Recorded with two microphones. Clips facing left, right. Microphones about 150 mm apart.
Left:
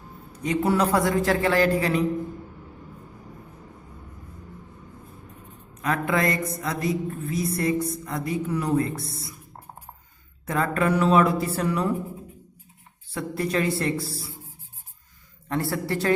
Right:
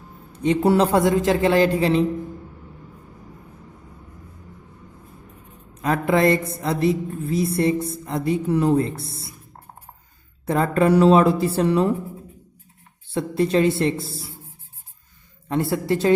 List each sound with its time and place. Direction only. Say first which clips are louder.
0.3 s a woman's voice: right 5 dB; 30° right (ahead or behind)
5.7 s a woman's voice: right 5 dB; 30° right (ahead or behind)
10.4 s a woman's voice: right 5 dB; 30° right (ahead or behind)
13.1 s a woman's voice: right 6 dB; 25° right (ahead or behind)
15.4 s a woman's voice: right 5 dB; 20° right (ahead or behind)